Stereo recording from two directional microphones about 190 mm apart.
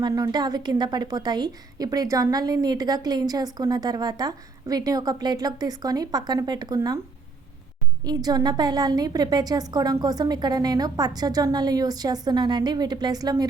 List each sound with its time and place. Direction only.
0.0 s a woman's voice: 20° right (ahead or behind)
8.0 s a woman's voice: 20° right (ahead or behind)